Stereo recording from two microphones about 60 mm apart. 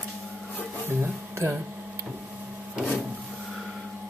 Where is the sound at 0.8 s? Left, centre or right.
Right.